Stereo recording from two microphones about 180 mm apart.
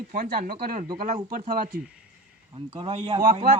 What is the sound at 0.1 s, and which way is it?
Speech, 50° right (ahead or behind).